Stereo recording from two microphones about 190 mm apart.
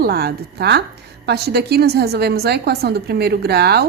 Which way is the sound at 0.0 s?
55° right (ahead or behind).